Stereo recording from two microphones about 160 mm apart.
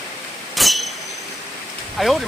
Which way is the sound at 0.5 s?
Centre (ahead or behind).